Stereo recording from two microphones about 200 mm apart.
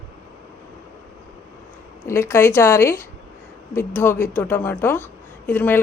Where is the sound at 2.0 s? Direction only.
15° left (ahead or behind).